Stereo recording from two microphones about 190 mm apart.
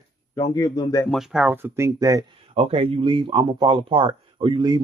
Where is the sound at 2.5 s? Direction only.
30° right (ahead or behind).